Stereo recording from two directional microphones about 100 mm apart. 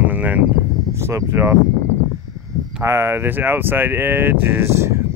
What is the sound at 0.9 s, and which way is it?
Speech, 25° right (ahead or behind).